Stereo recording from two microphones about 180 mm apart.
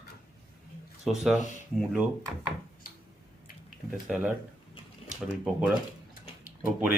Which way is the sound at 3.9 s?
5° right (ahead or behind).